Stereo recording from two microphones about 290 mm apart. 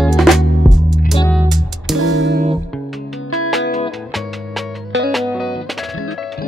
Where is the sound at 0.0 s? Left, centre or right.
Centre.